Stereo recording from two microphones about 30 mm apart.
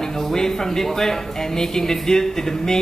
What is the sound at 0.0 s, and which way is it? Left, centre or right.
Speech, centre.